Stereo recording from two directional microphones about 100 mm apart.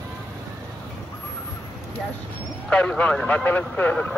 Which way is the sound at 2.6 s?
15° left (ahead or behind).